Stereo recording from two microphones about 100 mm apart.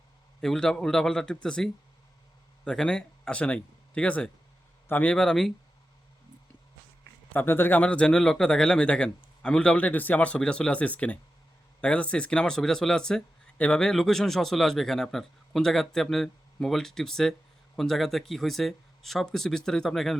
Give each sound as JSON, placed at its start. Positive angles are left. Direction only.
{"t": 0.4, "sound": "speech", "side_deg": 5}
{"t": 5.1, "sound": "speech", "side_deg": 5}
{"t": 7.3, "sound": "speech", "side_deg": 20}